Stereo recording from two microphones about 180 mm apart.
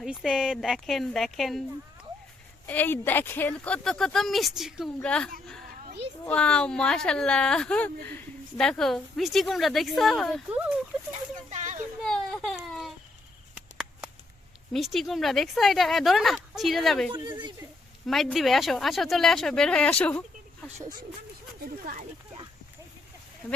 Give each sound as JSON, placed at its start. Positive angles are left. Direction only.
{"t": 0.0, "sound": "a woman's voice", "side_deg": 0}
{"t": 2.6, "sound": "a woman's voice", "side_deg": 10}
{"t": 11.1, "sound": "a sound", "side_deg": -40}
{"t": 12.0, "sound": "baby cry", "side_deg": 5}
{"t": 14.7, "sound": "a woman's voice", "side_deg": 0}
{"t": 17.2, "sound": "speech", "side_deg": -25}
{"t": 18.0, "sound": "a woman's voice", "side_deg": 0}